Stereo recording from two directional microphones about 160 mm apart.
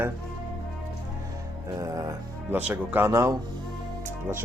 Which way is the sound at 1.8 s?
20° right (ahead or behind).